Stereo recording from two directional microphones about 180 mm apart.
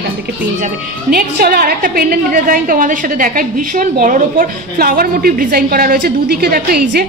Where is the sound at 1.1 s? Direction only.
55° right (ahead or behind).